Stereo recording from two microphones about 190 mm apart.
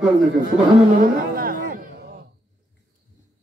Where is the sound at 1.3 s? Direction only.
50° right (ahead or behind).